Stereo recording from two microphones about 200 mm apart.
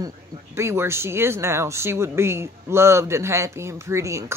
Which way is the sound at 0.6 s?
15° right (ahead or behind).